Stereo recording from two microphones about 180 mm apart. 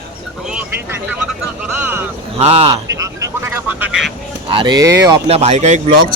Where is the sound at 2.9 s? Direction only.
15° right (ahead or behind).